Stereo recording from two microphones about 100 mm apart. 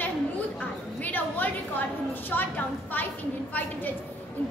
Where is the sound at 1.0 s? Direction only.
20° left (ahead or behind).